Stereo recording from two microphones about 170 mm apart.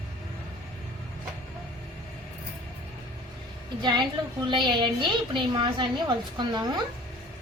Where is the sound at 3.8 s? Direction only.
25° right (ahead or behind).